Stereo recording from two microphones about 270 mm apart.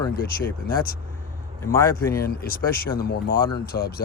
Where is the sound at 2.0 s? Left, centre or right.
Left.